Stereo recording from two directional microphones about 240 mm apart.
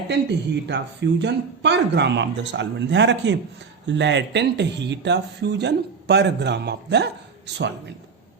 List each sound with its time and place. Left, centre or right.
0.1 s speech: right